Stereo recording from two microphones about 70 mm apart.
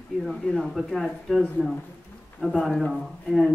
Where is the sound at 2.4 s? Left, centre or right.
Centre.